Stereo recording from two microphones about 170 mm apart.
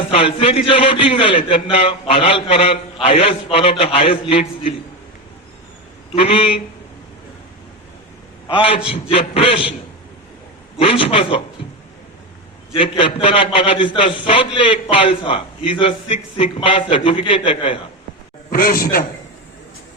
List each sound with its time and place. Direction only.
0.1 s a man's voice: 35° left (ahead or behind)
6.1 s a man's voice: 35° left (ahead or behind)
8.4 s a man's voice: 30° left (ahead or behind)
10.8 s a man's voice: 35° left (ahead or behind)
12.7 s a man's voice: 30° left (ahead or behind)
18.5 s a man's voice: 55° left (ahead or behind)